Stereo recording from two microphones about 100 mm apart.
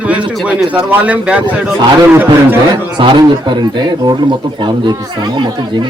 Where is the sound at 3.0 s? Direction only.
50° right (ahead or behind).